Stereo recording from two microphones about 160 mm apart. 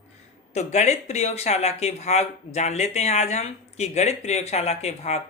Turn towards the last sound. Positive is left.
turn(degrees=40)  # may be behind; listen again after turning